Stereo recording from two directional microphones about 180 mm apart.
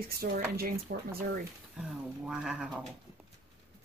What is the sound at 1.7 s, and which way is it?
Speech, 5° right (ahead or behind).